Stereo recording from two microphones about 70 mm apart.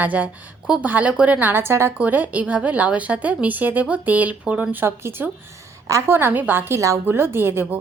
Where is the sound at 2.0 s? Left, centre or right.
Right.